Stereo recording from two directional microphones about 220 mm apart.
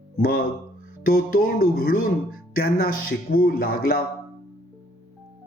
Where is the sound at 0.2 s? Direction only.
40° left (ahead or behind).